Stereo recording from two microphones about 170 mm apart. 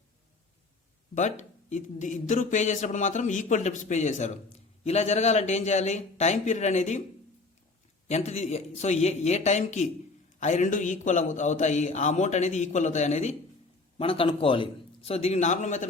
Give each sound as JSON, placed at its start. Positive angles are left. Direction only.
{"t": 1.1, "sound": "speech", "side_deg": 45}
{"t": 8.0, "sound": "speech", "side_deg": 40}
{"t": 14.0, "sound": "speech", "side_deg": 30}